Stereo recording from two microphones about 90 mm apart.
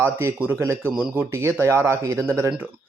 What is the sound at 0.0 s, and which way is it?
A man's voice, 25° right (ahead or behind).